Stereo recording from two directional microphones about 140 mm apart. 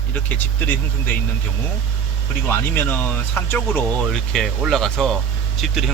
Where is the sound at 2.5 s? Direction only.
15° left (ahead or behind).